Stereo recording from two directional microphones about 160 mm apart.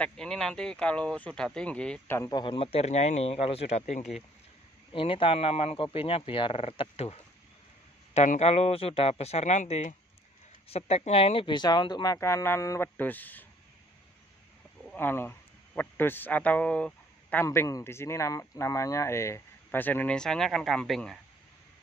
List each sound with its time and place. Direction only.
0.0 s speech: 5° left (ahead or behind)
2.1 s speech: 20° left (ahead or behind)
2.4 s speech: 35° left (ahead or behind)
4.9 s speech: 35° left (ahead or behind); by 13.5 s 10° left (ahead or behind)
14.9 s speech: 15° left (ahead or behind)
17.5 s speech: 20° left (ahead or behind); by 21.2 s centre (ahead or behind)